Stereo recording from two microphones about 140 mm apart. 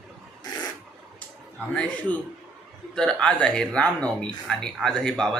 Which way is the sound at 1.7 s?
5° left (ahead or behind).